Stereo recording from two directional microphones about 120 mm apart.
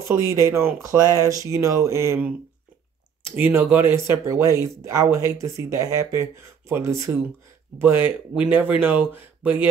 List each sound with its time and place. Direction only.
0.1 s speech: 25° right (ahead or behind)